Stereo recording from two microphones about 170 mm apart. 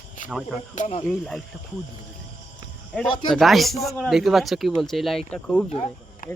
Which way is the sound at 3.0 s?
Centre (ahead or behind).